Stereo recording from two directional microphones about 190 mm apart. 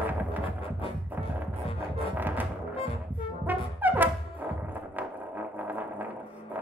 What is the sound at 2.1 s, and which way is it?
Music, 10° right (ahead or behind).